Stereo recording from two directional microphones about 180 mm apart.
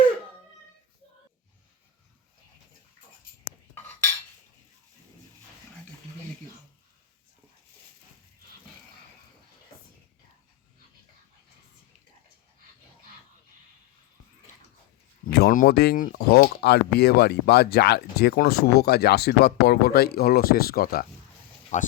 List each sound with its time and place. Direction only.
15.3 s speech: 55° left (ahead or behind)
21.7 s speech: 45° left (ahead or behind)